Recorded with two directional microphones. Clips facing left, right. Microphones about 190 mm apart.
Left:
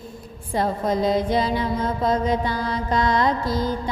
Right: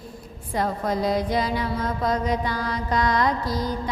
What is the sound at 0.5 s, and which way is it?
Music, 25° left (ahead or behind).